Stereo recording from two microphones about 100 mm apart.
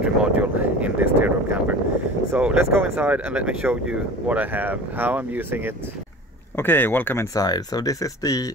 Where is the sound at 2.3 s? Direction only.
15° right (ahead or behind).